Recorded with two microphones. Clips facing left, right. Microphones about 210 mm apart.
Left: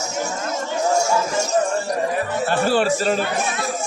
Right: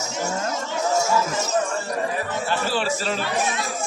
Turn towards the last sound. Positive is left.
turn(degrees=45)  # may be behind; listen again after turning